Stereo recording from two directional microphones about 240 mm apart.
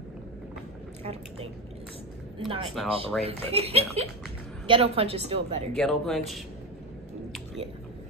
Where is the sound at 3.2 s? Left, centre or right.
Right.